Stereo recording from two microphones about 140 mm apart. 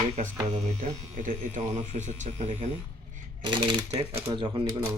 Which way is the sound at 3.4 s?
35° right (ahead or behind).